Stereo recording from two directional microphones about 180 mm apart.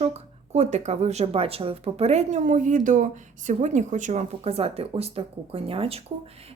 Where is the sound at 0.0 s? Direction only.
35° right (ahead or behind).